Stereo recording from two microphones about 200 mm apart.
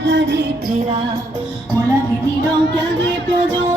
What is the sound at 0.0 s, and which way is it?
Music, 65° right (ahead or behind).